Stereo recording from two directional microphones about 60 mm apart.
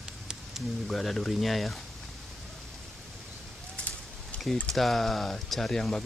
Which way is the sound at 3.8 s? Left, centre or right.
Left.